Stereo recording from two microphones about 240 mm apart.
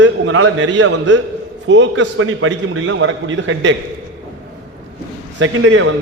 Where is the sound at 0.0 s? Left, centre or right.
Right.